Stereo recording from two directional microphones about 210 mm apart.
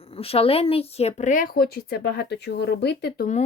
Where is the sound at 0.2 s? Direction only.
30° left (ahead or behind); by 3.2 s 50° left (ahead or behind).